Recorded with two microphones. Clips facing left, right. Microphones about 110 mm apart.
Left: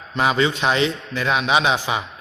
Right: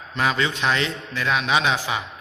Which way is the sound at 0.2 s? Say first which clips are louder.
Left 4 dB; 15° left (ahead or behind).